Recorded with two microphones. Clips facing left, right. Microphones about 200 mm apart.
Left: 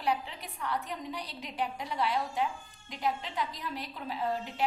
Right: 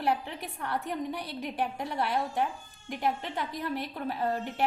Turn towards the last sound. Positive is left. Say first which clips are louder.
# right 3 dB
turn(degrees=-55)  # may be behind; listen again after turning